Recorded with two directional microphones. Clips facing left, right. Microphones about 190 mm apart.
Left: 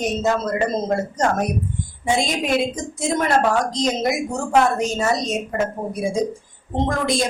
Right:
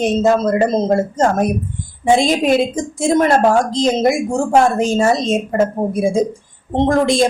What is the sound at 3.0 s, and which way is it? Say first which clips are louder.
A woman's voice: right 6 dB; 30° right (ahead or behind).